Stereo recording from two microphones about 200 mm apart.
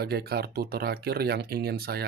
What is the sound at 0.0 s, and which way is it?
Speech, 50° right (ahead or behind).